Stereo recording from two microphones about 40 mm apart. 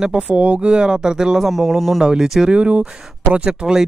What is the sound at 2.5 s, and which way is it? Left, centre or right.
Speech, right.